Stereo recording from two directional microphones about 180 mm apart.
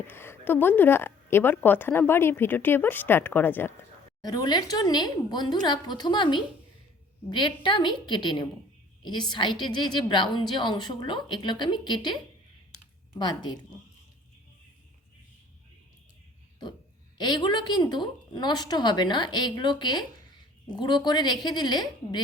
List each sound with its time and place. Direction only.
0.1 s a woman's voice: 10° left (ahead or behind)
4.2 s a woman's voice: 25° left (ahead or behind)
17.2 s a woman's voice: 25° left (ahead or behind)